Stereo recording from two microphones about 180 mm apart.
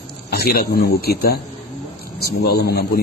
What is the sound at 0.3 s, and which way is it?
A man's voice, 60° left (ahead or behind).